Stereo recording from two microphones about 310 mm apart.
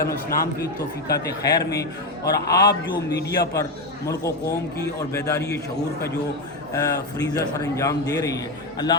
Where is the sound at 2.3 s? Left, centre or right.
Left.